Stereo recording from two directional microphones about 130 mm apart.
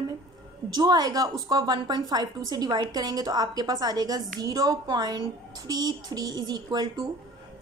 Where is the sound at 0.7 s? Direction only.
30° right (ahead or behind).